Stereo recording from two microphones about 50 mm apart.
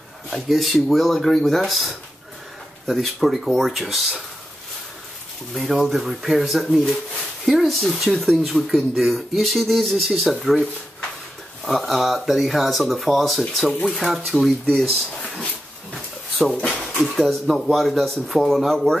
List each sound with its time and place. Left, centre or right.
0.3 s speech: centre
5.5 s speech: centre
11.6 s speech: centre
14.9 s speech: centre
16.5 s speech: left
17.0 s speech: centre